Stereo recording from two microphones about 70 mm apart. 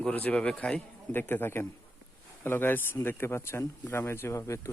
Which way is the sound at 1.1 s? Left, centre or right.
Left.